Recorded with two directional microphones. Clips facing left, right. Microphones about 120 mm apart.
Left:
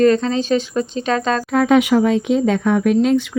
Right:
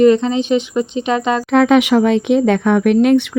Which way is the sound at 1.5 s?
85° right.